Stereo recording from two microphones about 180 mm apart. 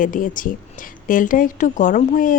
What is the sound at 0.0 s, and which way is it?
A woman's voice, 50° left (ahead or behind).